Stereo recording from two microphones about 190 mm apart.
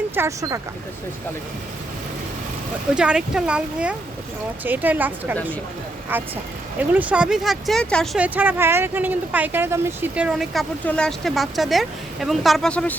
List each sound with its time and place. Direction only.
0.2 s a woman's voice: 15° right (ahead or behind)
2.9 s a woman's voice: 5° right (ahead or behind)
6.7 s speech: 10° right (ahead or behind)
8.2 s speech: 10° right (ahead or behind)